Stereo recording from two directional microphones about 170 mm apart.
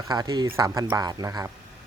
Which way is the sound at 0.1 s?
25° right (ahead or behind).